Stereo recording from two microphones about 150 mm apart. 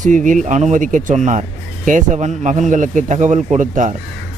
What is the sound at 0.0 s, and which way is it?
Speech, 60° right (ahead or behind).